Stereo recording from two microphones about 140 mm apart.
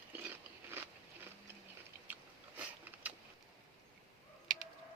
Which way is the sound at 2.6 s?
10° right (ahead or behind).